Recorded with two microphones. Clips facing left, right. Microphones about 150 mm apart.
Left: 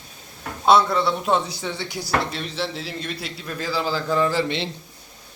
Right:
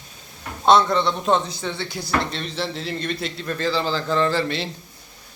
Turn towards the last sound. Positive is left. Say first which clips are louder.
# even
turn(degrees=15)  # may be behind; listen again after turning